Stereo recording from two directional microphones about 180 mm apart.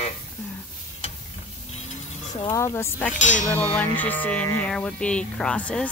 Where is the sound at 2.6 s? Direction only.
15° left (ahead or behind).